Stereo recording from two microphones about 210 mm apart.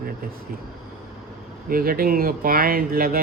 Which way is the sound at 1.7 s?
45° right (ahead or behind).